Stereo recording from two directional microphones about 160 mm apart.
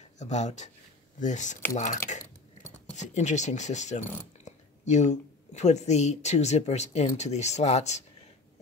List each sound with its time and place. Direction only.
0.2 s speech: 45° left (ahead or behind)
2.0 s a sound: 50° left (ahead or behind)
4.5 s speech: 45° left (ahead or behind)